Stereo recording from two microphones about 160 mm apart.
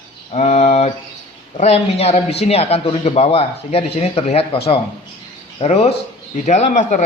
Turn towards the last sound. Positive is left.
turn(degrees=45)  # may be behind; listen again after turning